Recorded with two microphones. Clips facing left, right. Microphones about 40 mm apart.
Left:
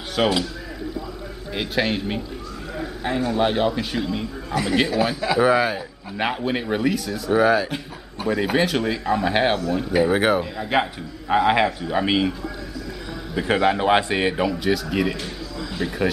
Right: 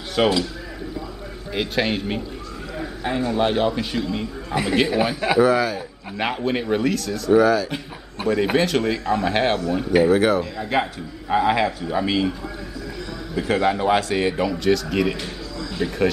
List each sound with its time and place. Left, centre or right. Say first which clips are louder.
0.2 s speech: right 2 dB; centre
1.5 s a man's voice: right 1 dB; centre
5.4 s a man's voice: even; centre
6.1 s speech: right 1 dB; centre
8.2 s a man's voice: right 2 dB; centre
8.5 s a man's voice: right 1 dB; centre
9.6 s speech: even; centre
10.0 s a man's voice: right 2 dB; centre
13.3 s a man's voice: left 1 dB; centre
14.3 s a man's voice: right 1 dB; centre